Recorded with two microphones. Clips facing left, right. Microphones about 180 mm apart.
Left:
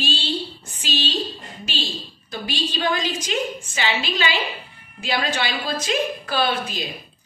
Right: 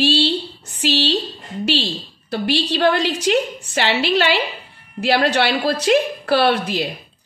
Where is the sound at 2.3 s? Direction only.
70° right (ahead or behind).